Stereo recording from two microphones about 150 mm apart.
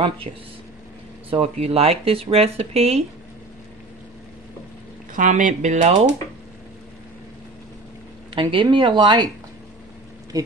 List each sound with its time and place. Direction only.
0.3 s speech: 40° right (ahead or behind)
5.1 s speech: 55° right (ahead or behind)
8.4 s speech: 35° right (ahead or behind)